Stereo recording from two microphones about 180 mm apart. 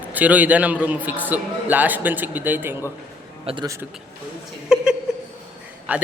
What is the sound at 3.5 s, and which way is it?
Speech, 30° right (ahead or behind).